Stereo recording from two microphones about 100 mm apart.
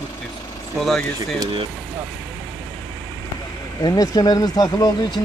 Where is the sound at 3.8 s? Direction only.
35° left (ahead or behind).